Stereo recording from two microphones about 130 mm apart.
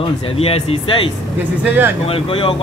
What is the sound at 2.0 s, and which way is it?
Speech, 45° left (ahead or behind).